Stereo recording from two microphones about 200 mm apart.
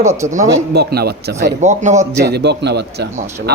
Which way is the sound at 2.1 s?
55° right (ahead or behind).